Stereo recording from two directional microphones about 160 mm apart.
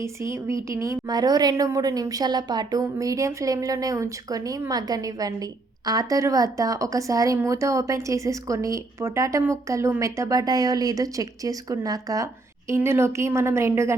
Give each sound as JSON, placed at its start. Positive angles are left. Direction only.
{"t": 0.0, "sound": "a woman's voice", "side_deg": -15}